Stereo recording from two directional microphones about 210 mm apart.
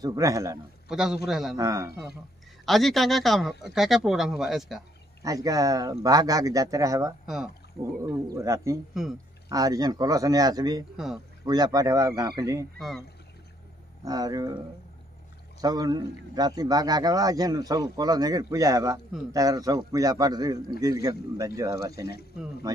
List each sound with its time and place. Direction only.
0.0 s a man's voice: 15° right (ahead or behind)
0.8 s speech: centre (ahead or behind)
1.6 s a man's voice: 15° right (ahead or behind)
2.6 s speech: centre (ahead or behind)
5.2 s a man's voice: 15° right (ahead or behind)
7.2 s speech: 5° right (ahead or behind)
8.0 s a man's voice: 15° right (ahead or behind)
9.0 s speech: centre (ahead or behind)
9.5 s a man's voice: 15° right (ahead or behind)
12.7 s speech: centre (ahead or behind)
14.0 s a man's voice: 15° right (ahead or behind)
15.6 s a man's voice: 20° right (ahead or behind)